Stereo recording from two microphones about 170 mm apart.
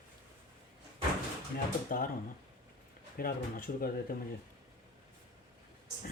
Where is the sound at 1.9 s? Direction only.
55° left (ahead or behind).